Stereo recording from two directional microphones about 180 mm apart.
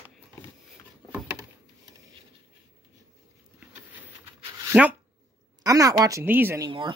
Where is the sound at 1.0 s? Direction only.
10° right (ahead or behind).